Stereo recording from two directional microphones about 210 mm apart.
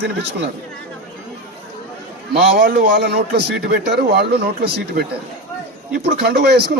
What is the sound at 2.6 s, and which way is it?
Speech, 45° right (ahead or behind).